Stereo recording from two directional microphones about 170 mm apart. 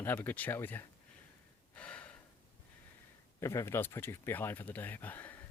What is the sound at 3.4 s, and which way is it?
Speech, 15° left (ahead or behind).